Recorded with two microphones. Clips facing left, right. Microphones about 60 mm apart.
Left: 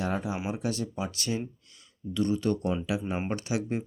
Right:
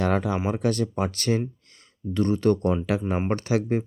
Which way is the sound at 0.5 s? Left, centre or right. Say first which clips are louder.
Right 7 dB; right.